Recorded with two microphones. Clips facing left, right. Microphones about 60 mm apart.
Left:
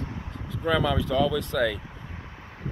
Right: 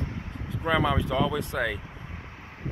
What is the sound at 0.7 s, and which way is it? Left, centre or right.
Speech, right.